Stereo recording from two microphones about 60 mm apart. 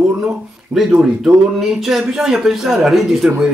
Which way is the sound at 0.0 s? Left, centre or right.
Right.